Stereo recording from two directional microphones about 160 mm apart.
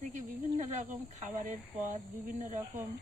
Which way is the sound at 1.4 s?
55° right (ahead or behind).